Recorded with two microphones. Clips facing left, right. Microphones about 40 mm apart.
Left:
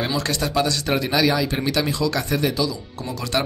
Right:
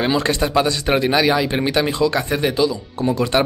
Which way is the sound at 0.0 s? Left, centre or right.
Right.